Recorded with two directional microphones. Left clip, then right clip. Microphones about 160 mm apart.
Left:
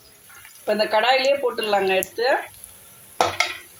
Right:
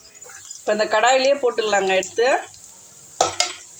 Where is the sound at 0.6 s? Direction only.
15° right (ahead or behind).